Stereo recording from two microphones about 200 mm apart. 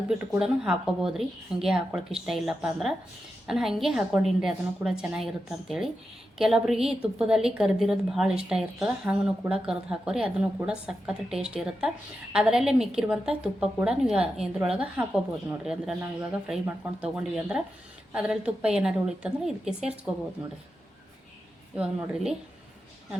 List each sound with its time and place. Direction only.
0.3 s a woman's voice: 5° right (ahead or behind)
21.8 s a woman's voice: 5° right (ahead or behind)